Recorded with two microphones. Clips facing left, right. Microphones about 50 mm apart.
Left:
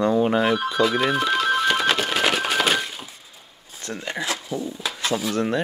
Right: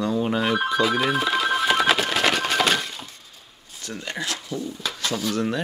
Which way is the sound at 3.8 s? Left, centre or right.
Left.